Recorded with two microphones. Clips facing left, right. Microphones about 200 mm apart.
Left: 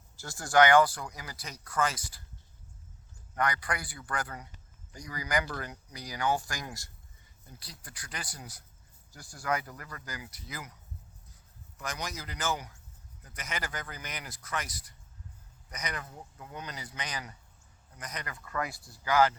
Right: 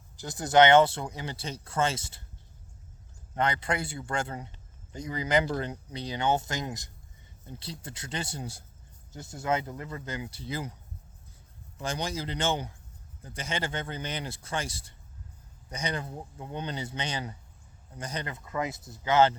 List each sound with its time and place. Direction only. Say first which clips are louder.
0.2 s a man's voice: right 3 dB; 20° right (ahead or behind)
3.3 s a man's voice: right 3 dB; 25° right (ahead or behind)
11.8 s a man's voice: right 6 dB; 30° right (ahead or behind)